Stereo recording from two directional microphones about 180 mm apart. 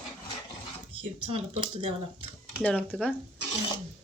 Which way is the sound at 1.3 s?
35° right (ahead or behind).